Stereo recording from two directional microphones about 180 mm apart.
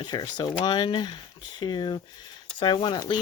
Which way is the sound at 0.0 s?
25° left (ahead or behind).